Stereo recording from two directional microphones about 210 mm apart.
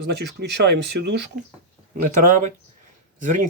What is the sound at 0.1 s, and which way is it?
Speech, 55° right (ahead or behind).